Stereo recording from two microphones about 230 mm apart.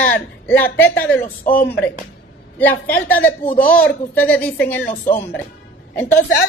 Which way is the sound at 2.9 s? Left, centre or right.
Centre.